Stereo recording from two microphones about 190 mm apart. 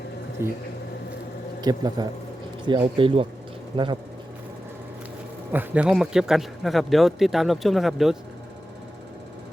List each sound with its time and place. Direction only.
0.4 s speech: 15° right (ahead or behind)
1.6 s speech: 20° right (ahead or behind)
5.5 s a man's voice: 10° right (ahead or behind)